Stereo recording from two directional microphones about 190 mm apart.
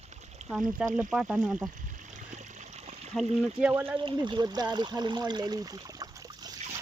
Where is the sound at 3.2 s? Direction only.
5° right (ahead or behind).